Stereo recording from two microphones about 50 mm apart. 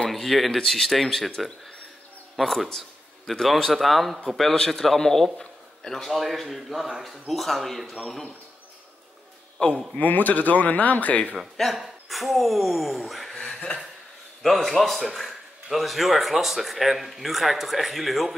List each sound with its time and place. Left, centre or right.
0.1 s speech: centre
2.3 s a man's voice: centre
6.1 s speech: centre
9.6 s speech: left
9.9 s speech: left
11.3 s speech: centre
13.4 s chuckle: centre
14.4 s speech: centre